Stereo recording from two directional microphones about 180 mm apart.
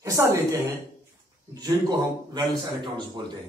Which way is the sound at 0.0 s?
15° right (ahead or behind).